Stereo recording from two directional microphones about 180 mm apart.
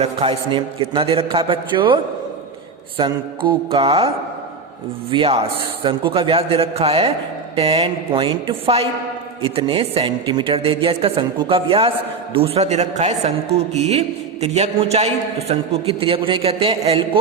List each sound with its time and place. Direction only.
0.0 s a man's voice: 30° right (ahead or behind)
3.0 s a man's voice: 30° right (ahead or behind)
5.1 s a man's voice: 30° right (ahead or behind)